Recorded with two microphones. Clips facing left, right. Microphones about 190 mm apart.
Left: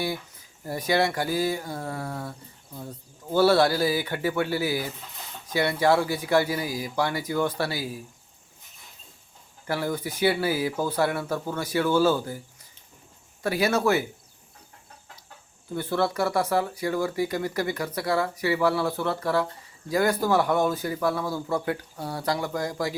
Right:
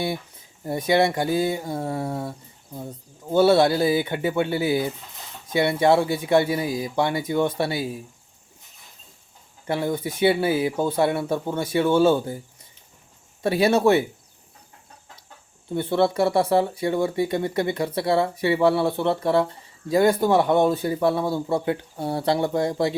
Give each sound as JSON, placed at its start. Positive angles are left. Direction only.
{"t": 0.0, "sound": "speech", "side_deg": -25}
{"t": 9.6, "sound": "speech", "side_deg": -25}
{"t": 13.4, "sound": "speech", "side_deg": -25}
{"t": 15.7, "sound": "speech", "side_deg": -25}